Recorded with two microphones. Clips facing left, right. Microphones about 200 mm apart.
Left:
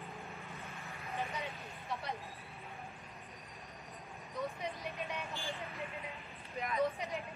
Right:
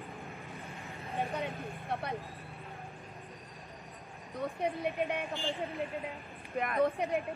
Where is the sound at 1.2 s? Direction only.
55° right (ahead or behind).